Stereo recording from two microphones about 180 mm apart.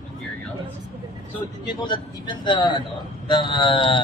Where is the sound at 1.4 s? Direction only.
25° left (ahead or behind).